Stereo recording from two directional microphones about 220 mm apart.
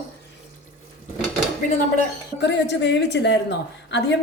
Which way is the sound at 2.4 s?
50° left (ahead or behind).